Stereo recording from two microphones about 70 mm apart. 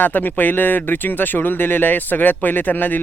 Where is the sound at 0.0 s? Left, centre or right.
Left.